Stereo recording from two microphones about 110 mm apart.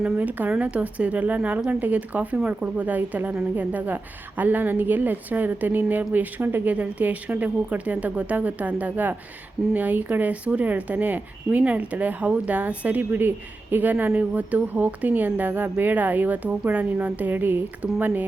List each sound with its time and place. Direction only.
0.0 s a woman's voice: 15° right (ahead or behind)